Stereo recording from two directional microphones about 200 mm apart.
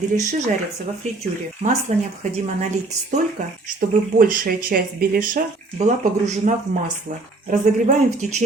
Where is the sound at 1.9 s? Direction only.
35° right (ahead or behind).